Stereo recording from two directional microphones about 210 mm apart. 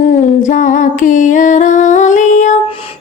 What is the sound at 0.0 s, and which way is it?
Music, 40° left (ahead or behind).